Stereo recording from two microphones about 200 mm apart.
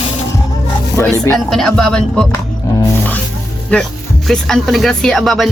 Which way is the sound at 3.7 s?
Centre (ahead or behind).